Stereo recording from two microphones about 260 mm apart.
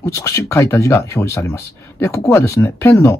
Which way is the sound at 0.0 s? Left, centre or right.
Centre.